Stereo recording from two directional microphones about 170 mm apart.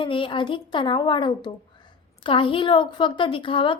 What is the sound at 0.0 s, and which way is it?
A woman's voice, 30° left (ahead or behind).